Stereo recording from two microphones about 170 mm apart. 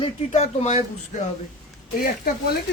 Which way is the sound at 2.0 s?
60° left (ahead or behind).